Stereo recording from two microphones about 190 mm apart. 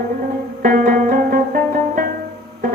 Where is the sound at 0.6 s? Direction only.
50° right (ahead or behind).